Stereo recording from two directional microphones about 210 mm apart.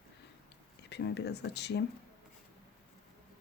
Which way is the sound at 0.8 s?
55° left (ahead or behind).